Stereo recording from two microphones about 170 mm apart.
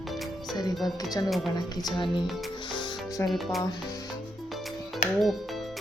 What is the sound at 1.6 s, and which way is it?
Music, 25° left (ahead or behind).